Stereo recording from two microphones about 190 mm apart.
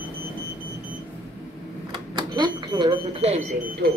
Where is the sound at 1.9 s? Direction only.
25° right (ahead or behind).